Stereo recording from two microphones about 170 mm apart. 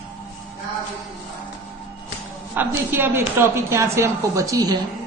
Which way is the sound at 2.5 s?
15° right (ahead or behind).